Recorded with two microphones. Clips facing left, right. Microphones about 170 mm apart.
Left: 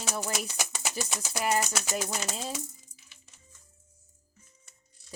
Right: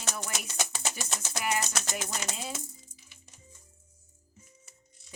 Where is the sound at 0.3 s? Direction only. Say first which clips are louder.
Left 1 dB; 10° left (ahead or behind).